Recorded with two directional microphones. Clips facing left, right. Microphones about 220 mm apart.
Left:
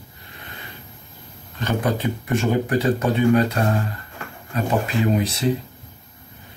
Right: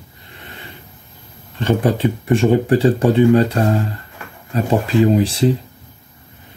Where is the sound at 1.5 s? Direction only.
30° right (ahead or behind).